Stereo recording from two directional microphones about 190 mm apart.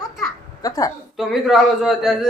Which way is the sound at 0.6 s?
20° left (ahead or behind).